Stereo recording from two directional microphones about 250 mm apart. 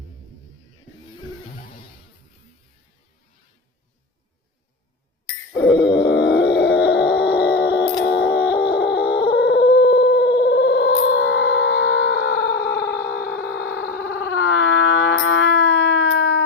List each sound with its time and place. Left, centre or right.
5.5 s grunt: left
8.0 s howl: left
9.0 s a sound: left
14.1 s howl: left